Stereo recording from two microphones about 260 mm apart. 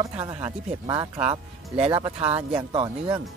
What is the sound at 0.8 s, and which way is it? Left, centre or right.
Speech, centre.